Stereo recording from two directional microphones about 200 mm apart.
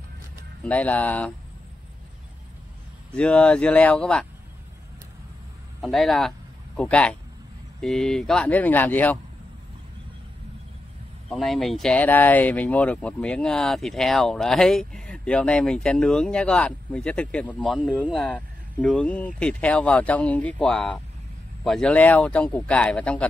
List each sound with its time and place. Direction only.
0.7 s speech: 5° left (ahead or behind)
3.2 s speech: 5° left (ahead or behind)
5.8 s speech: centre (ahead or behind)
11.2 s speech: centre (ahead or behind)
17.8 s speech: 5° right (ahead or behind)
18.2 s speech: 5° left (ahead or behind)